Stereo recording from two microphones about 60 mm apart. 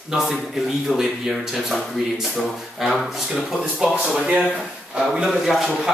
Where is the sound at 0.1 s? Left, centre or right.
Centre.